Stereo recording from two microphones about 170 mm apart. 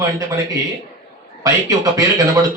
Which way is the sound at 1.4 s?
20° right (ahead or behind).